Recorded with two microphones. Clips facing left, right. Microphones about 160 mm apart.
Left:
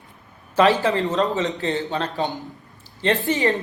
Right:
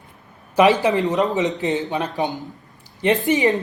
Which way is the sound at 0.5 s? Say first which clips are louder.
Right 2 dB; 15° right (ahead or behind).